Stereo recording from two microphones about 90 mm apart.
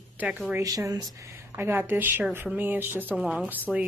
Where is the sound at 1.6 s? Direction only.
25° right (ahead or behind).